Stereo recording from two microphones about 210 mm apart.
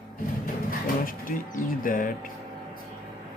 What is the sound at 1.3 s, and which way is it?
Speech, 40° left (ahead or behind).